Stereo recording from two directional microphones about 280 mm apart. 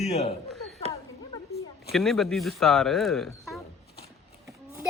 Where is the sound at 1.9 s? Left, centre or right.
Centre.